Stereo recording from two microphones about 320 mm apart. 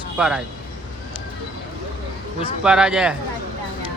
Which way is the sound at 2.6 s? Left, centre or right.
Centre.